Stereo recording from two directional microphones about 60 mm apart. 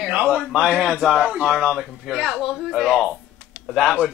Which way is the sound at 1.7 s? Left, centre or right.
Centre.